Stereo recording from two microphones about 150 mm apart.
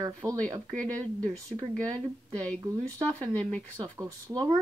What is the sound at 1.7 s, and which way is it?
Speech, 5° left (ahead or behind).